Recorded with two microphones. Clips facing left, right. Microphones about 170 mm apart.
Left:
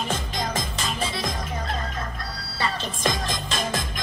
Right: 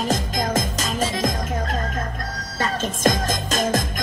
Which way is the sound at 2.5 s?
45° right (ahead or behind).